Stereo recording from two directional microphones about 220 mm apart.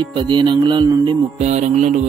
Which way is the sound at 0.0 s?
20° right (ahead or behind).